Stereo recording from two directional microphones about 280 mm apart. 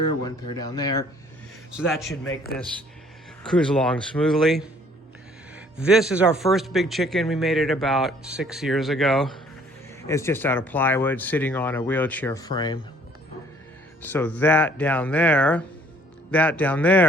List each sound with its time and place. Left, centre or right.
0.3 s speech: centre
1.7 s speech: centre
2.2 s a man's voice: left
3.4 s speech: centre
14.0 s speech: centre